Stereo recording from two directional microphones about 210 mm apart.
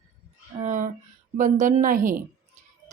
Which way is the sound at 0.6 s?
35° right (ahead or behind).